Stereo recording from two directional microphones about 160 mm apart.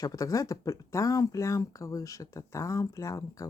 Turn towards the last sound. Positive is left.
turn(degrees=20)  # may be behind; listen again after turning